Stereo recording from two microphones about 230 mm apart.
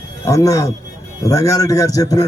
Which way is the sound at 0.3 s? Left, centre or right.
Centre.